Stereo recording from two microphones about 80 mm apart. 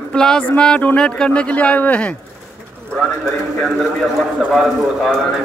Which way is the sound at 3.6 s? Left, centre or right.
Centre.